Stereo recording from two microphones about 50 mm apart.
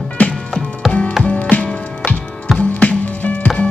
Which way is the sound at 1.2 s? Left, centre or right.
Left.